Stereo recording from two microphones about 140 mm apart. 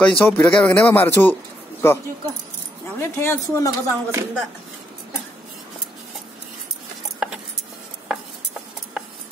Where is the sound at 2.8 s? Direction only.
15° left (ahead or behind).